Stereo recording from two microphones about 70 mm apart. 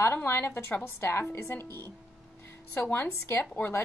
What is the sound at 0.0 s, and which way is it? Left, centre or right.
A woman's voice, left.